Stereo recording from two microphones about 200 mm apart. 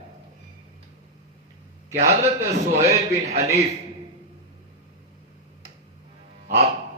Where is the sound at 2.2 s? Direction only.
35° right (ahead or behind).